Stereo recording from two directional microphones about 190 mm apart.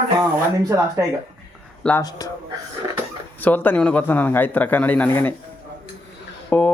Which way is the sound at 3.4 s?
10° left (ahead or behind).